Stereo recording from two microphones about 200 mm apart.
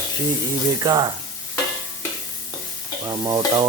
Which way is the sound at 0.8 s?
20° right (ahead or behind).